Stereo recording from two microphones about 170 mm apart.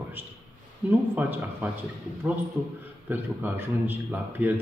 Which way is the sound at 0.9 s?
10° right (ahead or behind).